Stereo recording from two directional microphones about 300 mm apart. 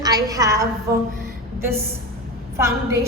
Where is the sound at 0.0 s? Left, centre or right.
Centre.